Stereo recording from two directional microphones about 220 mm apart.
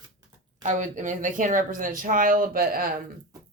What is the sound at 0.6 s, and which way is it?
Speech, 35° right (ahead or behind).